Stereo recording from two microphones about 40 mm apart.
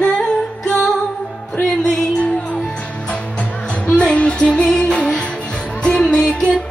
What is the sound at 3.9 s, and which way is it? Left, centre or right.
Music, left.